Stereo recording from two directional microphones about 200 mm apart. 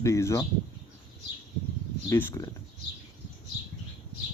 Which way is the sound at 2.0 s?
10° left (ahead or behind).